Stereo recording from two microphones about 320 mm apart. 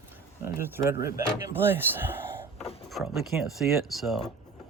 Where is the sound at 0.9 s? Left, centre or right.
Left.